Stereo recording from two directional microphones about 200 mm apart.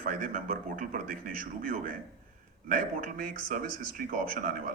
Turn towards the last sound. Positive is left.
turn(degrees=-45)  # may be behind; listen again after turning